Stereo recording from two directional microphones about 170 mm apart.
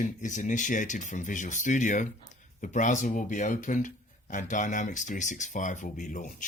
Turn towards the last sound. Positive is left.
turn(degrees=50)  # may be behind; listen again after turning